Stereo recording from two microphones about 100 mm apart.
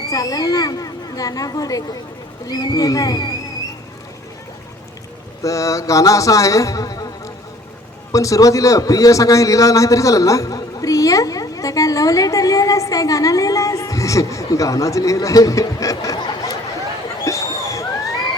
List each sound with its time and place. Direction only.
0.1 s a man's voice: 35° left (ahead or behind)
5.4 s a man's voice: 35° left (ahead or behind)
8.1 s a man's voice: 35° left (ahead or behind)
17.2 s a sound: 35° left (ahead or behind)